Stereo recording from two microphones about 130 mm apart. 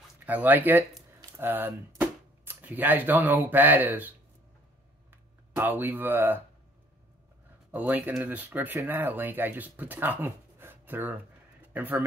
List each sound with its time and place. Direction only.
0.2 s speech: 15° right (ahead or behind)
5.1 s speech: 15° right (ahead or behind)
7.7 s speech: 10° right (ahead or behind)